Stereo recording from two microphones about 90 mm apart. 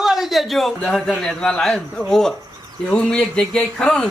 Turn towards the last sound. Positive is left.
turn(degrees=10)  # may be behind; listen again after turning